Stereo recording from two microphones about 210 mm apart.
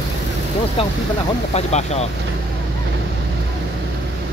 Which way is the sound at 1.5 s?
30° left (ahead or behind).